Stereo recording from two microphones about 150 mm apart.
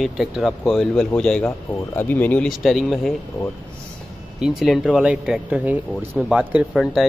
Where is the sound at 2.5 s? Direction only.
Centre (ahead or behind).